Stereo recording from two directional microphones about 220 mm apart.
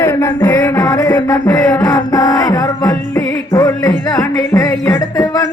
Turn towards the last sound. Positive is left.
turn(degrees=15)  # may be behind; listen again after turning